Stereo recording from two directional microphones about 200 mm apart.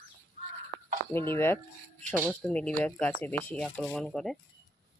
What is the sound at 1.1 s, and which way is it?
Speech, 10° left (ahead or behind).